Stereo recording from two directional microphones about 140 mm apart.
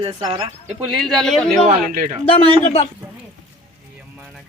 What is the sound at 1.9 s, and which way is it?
Speech, 75° right (ahead or behind).